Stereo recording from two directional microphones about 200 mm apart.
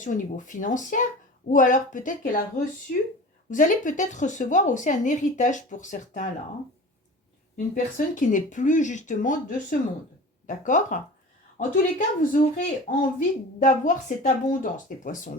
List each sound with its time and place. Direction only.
0.0 s a woman's voice: 40° left (ahead or behind)
7.9 s a woman's voice: 40° left (ahead or behind)